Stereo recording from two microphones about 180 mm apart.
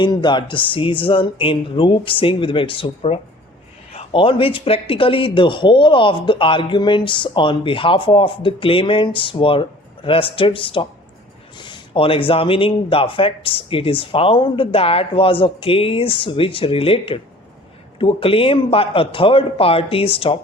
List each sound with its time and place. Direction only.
0.0 s speech: 25° left (ahead or behind)